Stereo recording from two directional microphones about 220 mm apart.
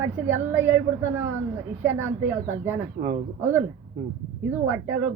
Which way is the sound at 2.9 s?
35° right (ahead or behind).